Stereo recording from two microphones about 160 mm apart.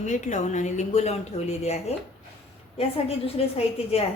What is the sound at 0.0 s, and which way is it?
Speech, 50° left (ahead or behind).